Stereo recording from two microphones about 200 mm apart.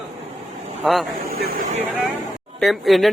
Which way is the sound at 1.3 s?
50° right (ahead or behind).